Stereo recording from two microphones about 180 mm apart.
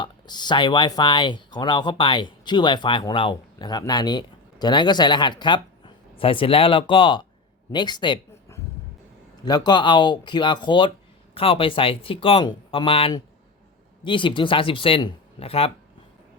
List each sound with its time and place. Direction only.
0.0 s speech: 25° left (ahead or behind)
8.5 s a sound: 15° left (ahead or behind)
9.4 s speech: 25° left (ahead or behind)